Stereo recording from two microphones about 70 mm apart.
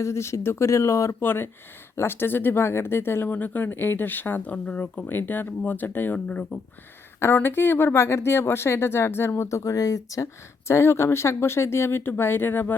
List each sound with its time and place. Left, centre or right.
0.0 s speech: left
1.2 s speech: left
7.2 s speech: left
10.7 s speech: left